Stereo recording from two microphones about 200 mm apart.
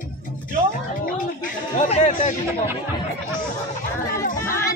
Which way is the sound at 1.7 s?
35° left (ahead or behind).